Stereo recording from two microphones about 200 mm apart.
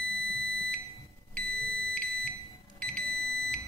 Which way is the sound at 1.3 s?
5° left (ahead or behind).